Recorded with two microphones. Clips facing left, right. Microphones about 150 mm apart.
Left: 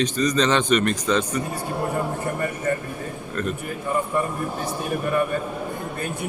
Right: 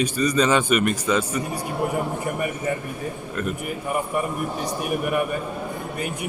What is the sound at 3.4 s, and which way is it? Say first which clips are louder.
Speech: even; 10° right (ahead or behind).